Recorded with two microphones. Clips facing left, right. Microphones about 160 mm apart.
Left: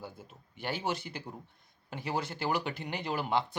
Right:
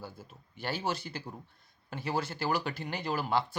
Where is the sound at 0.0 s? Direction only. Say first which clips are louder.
Even; 20° left (ahead or behind).